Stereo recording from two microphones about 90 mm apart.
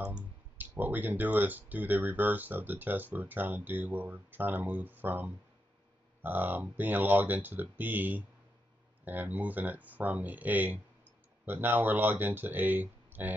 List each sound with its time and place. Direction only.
0.0 s speech: 15° right (ahead or behind)